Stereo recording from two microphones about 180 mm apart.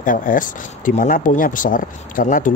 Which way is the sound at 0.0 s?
50° left (ahead or behind).